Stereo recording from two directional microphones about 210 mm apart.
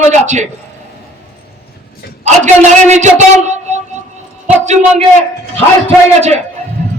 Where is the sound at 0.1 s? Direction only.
35° right (ahead or behind).